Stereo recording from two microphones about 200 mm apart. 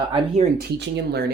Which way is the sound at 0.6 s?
60° right (ahead or behind).